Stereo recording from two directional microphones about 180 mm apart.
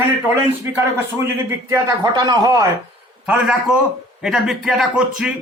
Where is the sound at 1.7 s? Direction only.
15° right (ahead or behind).